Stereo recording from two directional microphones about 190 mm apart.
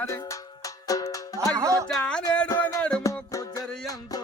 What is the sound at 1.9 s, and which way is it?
Music, 5° left (ahead or behind).